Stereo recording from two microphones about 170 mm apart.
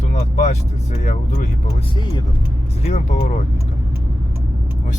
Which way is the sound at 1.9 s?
25° left (ahead or behind).